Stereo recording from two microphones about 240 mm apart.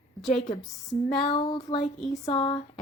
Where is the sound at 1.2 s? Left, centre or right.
Left.